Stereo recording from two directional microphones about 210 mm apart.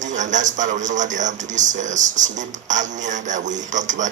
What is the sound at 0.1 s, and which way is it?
A man's voice, 35° right (ahead or behind).